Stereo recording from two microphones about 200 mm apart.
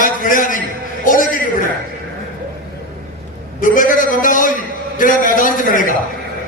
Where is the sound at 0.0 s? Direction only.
45° left (ahead or behind).